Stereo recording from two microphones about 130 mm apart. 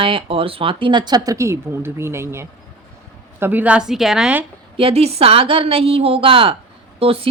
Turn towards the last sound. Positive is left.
turn(degrees=-45)  # may be behind; listen again after turning